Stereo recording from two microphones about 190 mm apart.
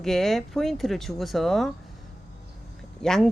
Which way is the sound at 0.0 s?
Centre (ahead or behind).